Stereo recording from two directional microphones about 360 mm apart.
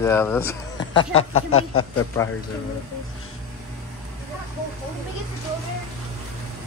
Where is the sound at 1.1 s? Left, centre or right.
Left.